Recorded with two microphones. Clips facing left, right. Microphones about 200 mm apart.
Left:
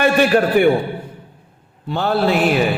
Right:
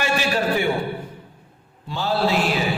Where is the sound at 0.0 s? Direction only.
55° left (ahead or behind).